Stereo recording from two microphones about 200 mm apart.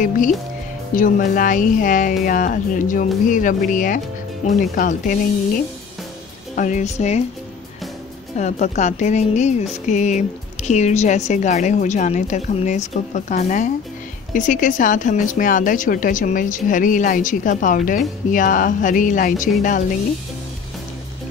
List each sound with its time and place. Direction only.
0.9 s speech: 40° left (ahead or behind)
6.5 s speech: 40° left (ahead or behind)
8.4 s speech: 35° left (ahead or behind)